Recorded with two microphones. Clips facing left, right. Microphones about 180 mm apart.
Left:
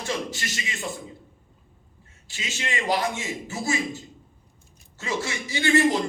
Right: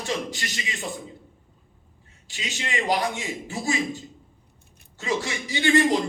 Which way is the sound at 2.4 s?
20° right (ahead or behind).